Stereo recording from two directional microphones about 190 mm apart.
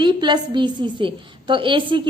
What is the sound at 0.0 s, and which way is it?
A woman's voice, 25° right (ahead or behind).